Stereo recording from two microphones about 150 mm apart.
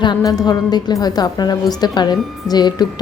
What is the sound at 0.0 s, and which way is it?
Speech, 25° left (ahead or behind).